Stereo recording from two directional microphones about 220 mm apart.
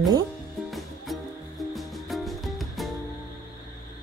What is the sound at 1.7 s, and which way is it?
Music, centre (ahead or behind).